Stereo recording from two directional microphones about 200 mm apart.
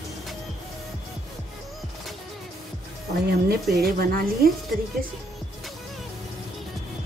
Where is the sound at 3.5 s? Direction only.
50° right (ahead or behind).